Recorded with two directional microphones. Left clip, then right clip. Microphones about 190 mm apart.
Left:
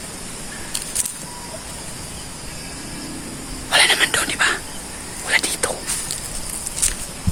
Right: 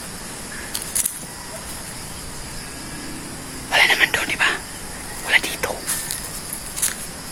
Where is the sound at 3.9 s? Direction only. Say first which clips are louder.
Even; 15° left (ahead or behind).